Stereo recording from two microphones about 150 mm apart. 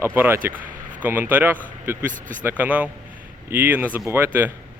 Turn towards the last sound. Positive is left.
turn(degrees=-15)  # may be behind; listen again after turning